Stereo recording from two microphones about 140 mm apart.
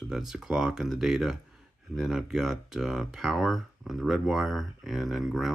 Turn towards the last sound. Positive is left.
turn(degrees=0)  # may be behind; listen again after turning